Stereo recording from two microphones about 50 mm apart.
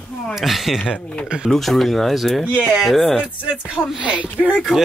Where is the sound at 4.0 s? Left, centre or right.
Right.